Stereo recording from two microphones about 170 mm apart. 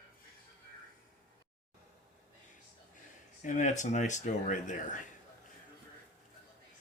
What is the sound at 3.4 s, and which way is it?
Speech, 45° left (ahead or behind).